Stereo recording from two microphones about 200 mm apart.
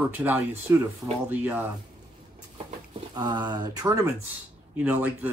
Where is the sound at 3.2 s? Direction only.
20° right (ahead or behind).